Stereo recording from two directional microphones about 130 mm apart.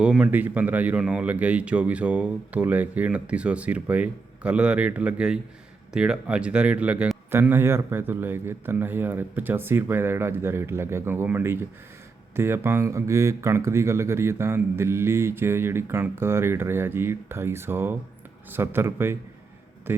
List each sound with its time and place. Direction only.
0.0 s speech: 5° right (ahead or behind)